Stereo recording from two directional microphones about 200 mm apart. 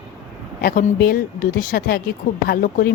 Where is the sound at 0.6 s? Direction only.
45° left (ahead or behind).